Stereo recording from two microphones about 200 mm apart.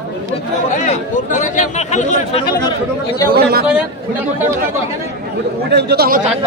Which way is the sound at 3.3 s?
50° right (ahead or behind).